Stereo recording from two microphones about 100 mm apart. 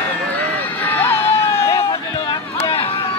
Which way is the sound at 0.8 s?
25° left (ahead or behind).